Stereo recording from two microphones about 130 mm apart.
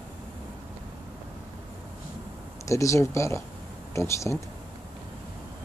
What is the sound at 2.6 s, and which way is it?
Speech, 25° left (ahead or behind).